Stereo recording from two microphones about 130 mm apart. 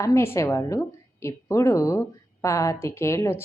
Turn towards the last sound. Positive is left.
turn(degrees=20)  # may be behind; listen again after turning